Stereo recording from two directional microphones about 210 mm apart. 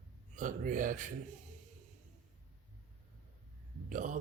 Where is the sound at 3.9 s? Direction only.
40° right (ahead or behind).